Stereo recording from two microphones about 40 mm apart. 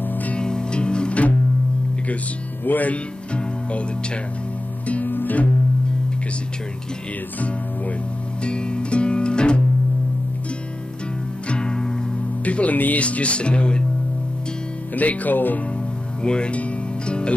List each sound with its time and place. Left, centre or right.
0.1 s music: left
0.4 s music: left
2.6 s speech: left
5.0 s music: left
8.5 s music: left
11.4 s music: left
12.4 s speech: left
13.0 s speech: left
15.0 s speech: left
16.2 s music: left